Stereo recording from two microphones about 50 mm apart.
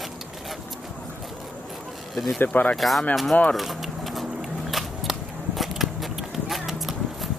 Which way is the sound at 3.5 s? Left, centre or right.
Centre.